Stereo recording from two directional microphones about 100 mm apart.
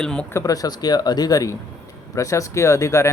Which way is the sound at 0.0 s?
10° left (ahead or behind).